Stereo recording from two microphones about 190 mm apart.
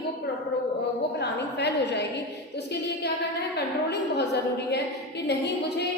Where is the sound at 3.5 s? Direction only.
60° left (ahead or behind).